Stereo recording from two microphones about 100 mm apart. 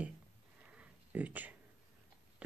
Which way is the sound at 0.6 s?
15° right (ahead or behind).